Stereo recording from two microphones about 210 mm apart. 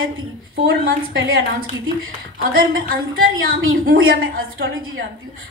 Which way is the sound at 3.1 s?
70° right (ahead or behind).